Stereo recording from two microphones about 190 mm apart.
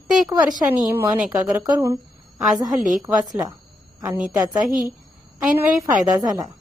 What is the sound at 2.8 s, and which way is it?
Speech, 40° right (ahead or behind).